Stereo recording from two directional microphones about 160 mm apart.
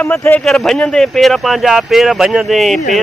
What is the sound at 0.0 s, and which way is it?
Speech, 10° left (ahead or behind).